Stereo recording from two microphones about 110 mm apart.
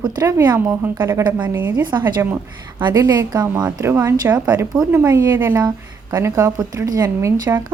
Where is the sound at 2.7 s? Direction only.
40° right (ahead or behind).